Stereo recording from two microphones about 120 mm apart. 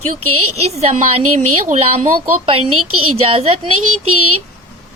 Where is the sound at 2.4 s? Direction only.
50° right (ahead or behind).